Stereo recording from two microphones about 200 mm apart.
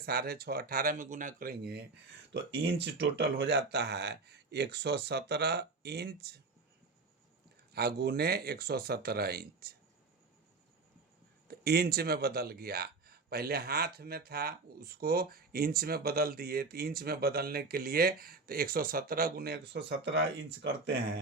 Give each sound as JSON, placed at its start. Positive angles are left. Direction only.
{"t": 0.0, "sound": "speech", "side_deg": -50}
{"t": 2.8, "sound": "speech", "side_deg": -60}
{"t": 7.7, "sound": "speech", "side_deg": -50}
{"t": 11.4, "sound": "speech", "side_deg": -50}